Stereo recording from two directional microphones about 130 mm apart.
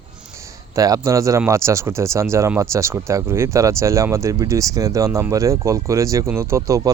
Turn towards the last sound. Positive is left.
turn(degrees=-25)  # may be behind; listen again after turning